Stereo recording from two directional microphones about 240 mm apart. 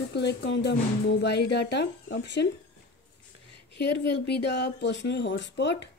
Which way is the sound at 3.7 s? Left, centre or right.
Left.